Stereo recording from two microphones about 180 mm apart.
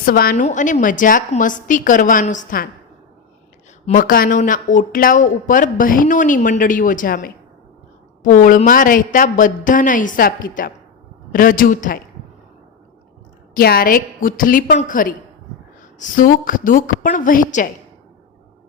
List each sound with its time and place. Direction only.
0.0 s speech: 55° left (ahead or behind)
3.8 s speech: 50° left (ahead or behind)
13.5 s speech: 55° left (ahead or behind)